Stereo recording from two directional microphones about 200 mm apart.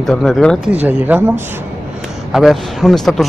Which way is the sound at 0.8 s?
10° right (ahead or behind).